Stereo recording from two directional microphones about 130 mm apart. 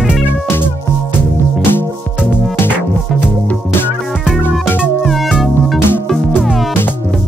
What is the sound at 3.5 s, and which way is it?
Music, 15° left (ahead or behind).